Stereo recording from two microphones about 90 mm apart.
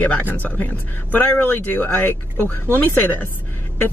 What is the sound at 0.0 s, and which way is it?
Speech, 20° left (ahead or behind).